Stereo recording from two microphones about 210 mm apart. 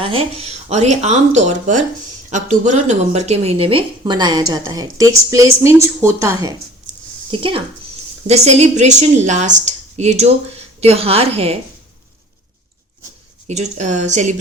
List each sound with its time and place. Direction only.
0.0 s a woman's voice: 25° right (ahead or behind)
6.9 s a sound: 35° right (ahead or behind)
7.3 s a woman's voice: 25° right (ahead or behind)
13.5 s a woman's voice: 35° right (ahead or behind)